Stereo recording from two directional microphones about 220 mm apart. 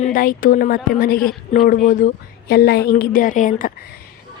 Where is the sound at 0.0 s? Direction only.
40° left (ahead or behind).